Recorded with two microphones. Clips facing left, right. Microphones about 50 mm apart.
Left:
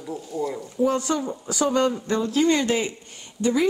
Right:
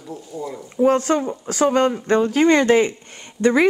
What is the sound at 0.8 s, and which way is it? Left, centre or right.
Speech, right.